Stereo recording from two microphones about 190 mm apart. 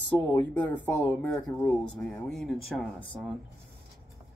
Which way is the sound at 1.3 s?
5° left (ahead or behind).